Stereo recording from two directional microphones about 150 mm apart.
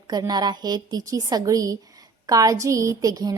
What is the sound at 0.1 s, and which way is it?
A woman's voice, 25° right (ahead or behind).